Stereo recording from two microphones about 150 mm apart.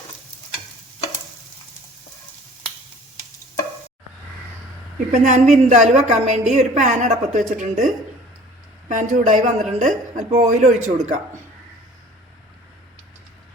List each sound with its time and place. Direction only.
5.1 s a woman's voice: 50° right (ahead or behind)
8.9 s a woman's voice: 50° right (ahead or behind)